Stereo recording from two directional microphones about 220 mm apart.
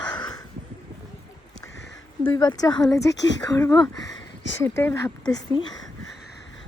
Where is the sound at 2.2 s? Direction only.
15° left (ahead or behind).